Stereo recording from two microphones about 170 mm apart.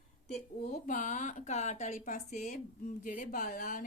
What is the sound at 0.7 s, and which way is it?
A woman's voice, 50° left (ahead or behind).